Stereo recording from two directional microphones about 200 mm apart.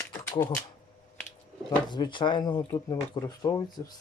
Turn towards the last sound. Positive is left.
turn(degrees=20)  # may be behind; listen again after turning